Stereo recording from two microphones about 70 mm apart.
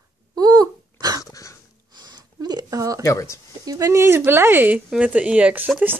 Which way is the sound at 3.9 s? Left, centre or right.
Right.